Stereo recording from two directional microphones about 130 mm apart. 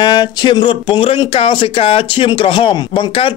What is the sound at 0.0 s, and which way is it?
Speech, 35° left (ahead or behind).